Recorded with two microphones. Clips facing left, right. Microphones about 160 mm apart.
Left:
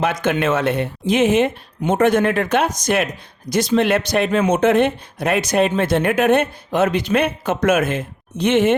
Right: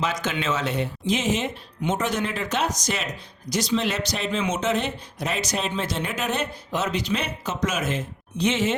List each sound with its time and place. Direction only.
0.0 s speech: 55° left (ahead or behind)